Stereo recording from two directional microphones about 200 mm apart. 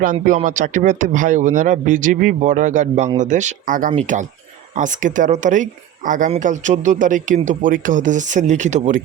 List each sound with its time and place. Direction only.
0.0 s speech: 40° right (ahead or behind)